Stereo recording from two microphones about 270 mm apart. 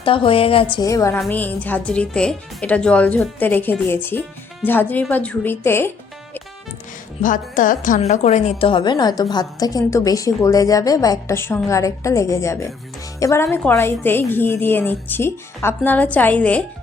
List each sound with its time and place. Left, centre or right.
0.0 s a woman's voice: centre
7.2 s a woman's voice: left; by 16.6 s centre